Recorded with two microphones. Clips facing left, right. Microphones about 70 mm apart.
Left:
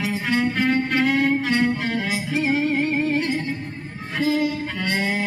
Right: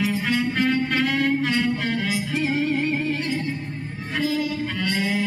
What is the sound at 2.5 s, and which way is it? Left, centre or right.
Music, centre.